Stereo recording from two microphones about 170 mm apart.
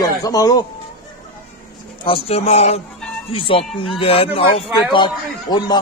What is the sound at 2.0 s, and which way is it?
A man's voice, 35° left (ahead or behind).